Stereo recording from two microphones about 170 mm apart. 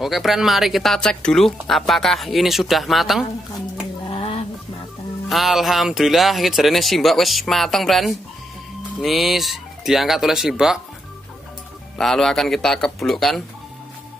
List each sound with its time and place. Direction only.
0.0 s speech: centre (ahead or behind)
4.1 s a sound: 35° left (ahead or behind)
5.3 s speech: centre (ahead or behind)
12.0 s speech: 5° left (ahead or behind)